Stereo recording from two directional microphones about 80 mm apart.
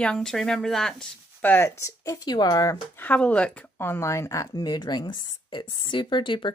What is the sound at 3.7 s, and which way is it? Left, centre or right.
Speech, left.